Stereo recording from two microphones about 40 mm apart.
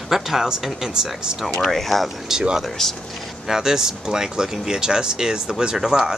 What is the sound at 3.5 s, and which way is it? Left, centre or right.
Speech, centre.